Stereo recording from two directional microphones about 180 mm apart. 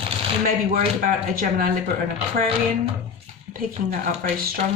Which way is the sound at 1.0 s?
50° right (ahead or behind).